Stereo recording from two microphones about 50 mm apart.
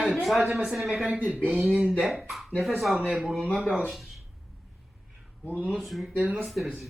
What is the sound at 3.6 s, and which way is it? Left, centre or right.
Speech, right.